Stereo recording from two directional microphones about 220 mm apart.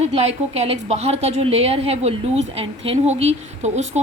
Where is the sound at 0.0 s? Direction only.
30° right (ahead or behind).